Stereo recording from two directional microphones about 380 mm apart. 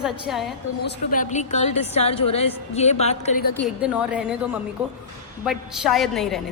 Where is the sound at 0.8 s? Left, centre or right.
Left.